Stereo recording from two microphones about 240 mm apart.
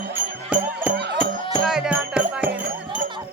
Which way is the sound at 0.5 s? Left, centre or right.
Centre.